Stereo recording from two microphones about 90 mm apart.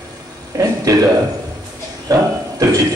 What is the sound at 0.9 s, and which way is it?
Speech, 35° right (ahead or behind).